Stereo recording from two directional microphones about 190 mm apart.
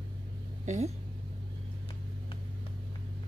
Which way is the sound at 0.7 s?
35° right (ahead or behind).